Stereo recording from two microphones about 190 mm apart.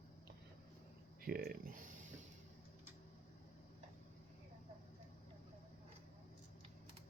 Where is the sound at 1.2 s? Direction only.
50° right (ahead or behind).